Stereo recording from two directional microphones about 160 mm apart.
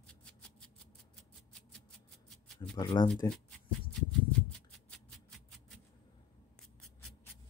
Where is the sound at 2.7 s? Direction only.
25° left (ahead or behind).